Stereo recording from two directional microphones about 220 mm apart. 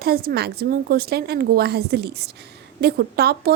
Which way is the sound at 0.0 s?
45° right (ahead or behind).